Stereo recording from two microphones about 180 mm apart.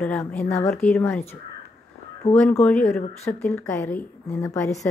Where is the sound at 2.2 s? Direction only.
35° left (ahead or behind).